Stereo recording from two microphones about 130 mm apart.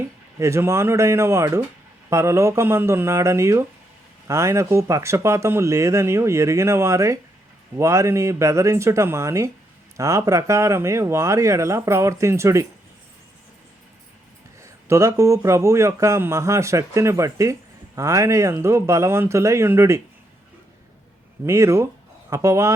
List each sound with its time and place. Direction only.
0.0 s a man's voice: 25° right (ahead or behind)
14.6 s a man's voice: 25° right (ahead or behind)
21.4 s a man's voice: 20° right (ahead or behind)